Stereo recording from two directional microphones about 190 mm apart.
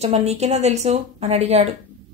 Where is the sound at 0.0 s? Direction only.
35° right (ahead or behind).